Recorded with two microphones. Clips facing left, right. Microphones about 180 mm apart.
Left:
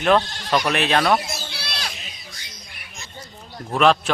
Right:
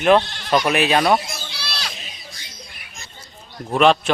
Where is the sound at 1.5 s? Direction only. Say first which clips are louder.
Even; 55° left (ahead or behind).